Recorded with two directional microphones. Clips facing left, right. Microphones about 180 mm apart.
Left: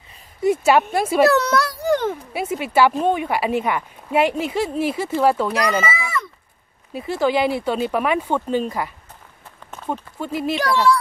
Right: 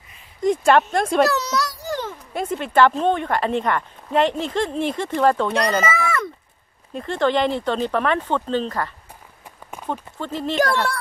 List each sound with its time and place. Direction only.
0.4 s speech: 5° left (ahead or behind)
1.2 s a child's voice: 55° left (ahead or behind)
2.3 s a woman's voice: 10° left (ahead or behind)
5.6 s a child's voice: 35° right (ahead or behind)
5.9 s a sound: 55° right (ahead or behind)
6.9 s a woman's voice: 5° left (ahead or behind)
10.1 s a woman's voice: 10° left (ahead or behind)
10.5 s speech: 50° right (ahead or behind)